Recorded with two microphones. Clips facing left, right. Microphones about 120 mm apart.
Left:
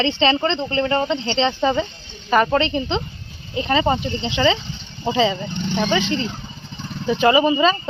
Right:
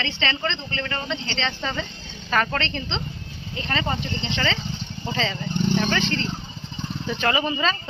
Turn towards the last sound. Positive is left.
turn(degrees=15)  # may be behind; listen again after turning